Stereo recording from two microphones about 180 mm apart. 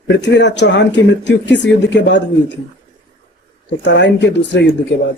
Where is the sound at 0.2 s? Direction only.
75° left (ahead or behind).